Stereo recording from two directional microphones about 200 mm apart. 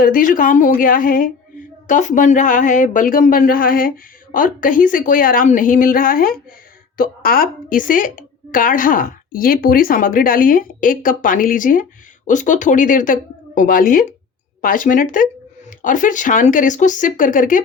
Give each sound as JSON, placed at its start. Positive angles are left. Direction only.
{"t": 0.0, "sound": "a woman's voice", "side_deg": 45}